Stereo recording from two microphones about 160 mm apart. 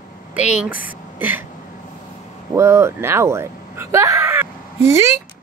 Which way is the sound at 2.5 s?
15° right (ahead or behind).